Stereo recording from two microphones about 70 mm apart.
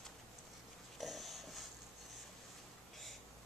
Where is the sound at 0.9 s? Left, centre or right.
Centre.